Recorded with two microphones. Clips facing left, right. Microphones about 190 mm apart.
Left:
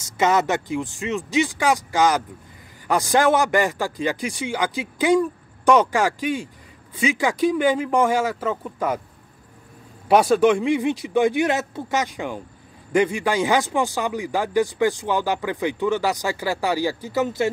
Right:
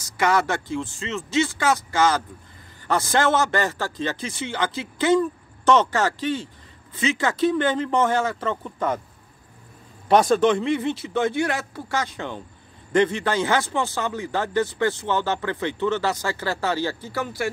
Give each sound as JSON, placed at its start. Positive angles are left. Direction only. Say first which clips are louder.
{"t": 0.0, "sound": "a man's voice", "louder": "left 2 dB", "side_deg": 20}
{"t": 10.0, "sound": "a man's voice", "louder": "left 2 dB", "side_deg": 10}